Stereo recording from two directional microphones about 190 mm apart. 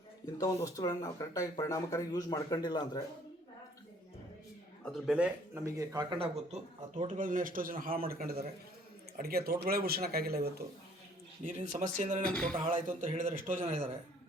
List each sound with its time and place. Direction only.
0.3 s speech: 20° left (ahead or behind)
4.9 s speech: 5° right (ahead or behind); by 6.6 s 25° right (ahead or behind)
7.0 s speech: 45° right (ahead or behind)
11.4 s a man's voice: 40° right (ahead or behind)
12.3 s speech: 5° left (ahead or behind)
12.5 s a man's voice: 35° right (ahead or behind)